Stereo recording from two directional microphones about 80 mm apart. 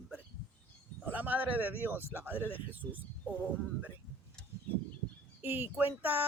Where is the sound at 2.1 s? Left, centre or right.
Right.